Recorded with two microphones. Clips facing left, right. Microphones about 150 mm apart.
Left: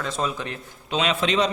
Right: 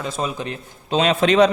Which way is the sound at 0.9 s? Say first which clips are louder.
Right 6 dB; 40° right (ahead or behind).